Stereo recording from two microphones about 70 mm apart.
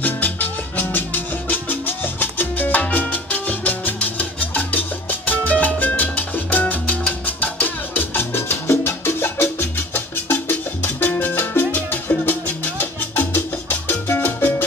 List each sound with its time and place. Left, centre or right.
0.0 s music: left